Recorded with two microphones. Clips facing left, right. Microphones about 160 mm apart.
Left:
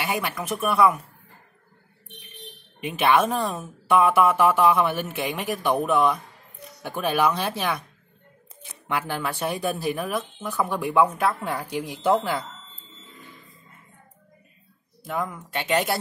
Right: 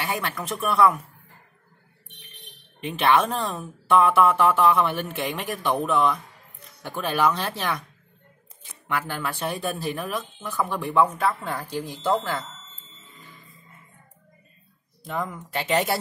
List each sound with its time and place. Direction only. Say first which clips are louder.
0.0 s speech: left 1 dB; 15° left (ahead or behind)
2.8 s speech: even; 15° left (ahead or behind)
3.5 s speech: right 4 dB; 5° left (ahead or behind)
4.2 s speech: even; 15° left (ahead or behind)
4.9 s a woman's voice: left 1 dB; 5° left (ahead or behind)
5.2 s speech: left 2 dB; 15° left (ahead or behind)
8.8 s speech: left 1 dB; 15° left (ahead or behind)
15.5 s a woman's voice: even; centre (ahead or behind)